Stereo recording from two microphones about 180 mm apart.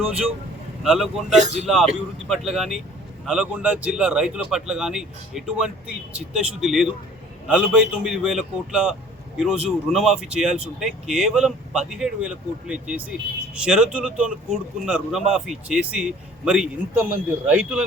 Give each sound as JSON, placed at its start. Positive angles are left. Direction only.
{"t": 0.8, "sound": "speech", "side_deg": 0}
{"t": 1.4, "sound": "speech", "side_deg": -40}
{"t": 2.3, "sound": "speech", "side_deg": 0}